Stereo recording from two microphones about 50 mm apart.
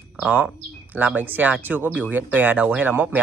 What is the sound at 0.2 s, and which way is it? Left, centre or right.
Speech, right.